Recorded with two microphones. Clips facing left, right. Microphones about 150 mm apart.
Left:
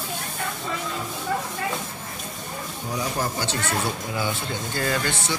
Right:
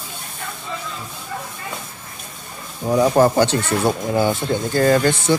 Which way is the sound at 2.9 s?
65° right (ahead or behind).